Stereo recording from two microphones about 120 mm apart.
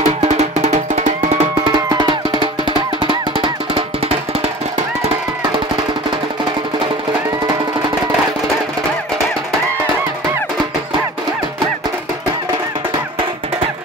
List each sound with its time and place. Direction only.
0.0 s music: 65° right (ahead or behind)
1.6 s music: 40° right (ahead or behind)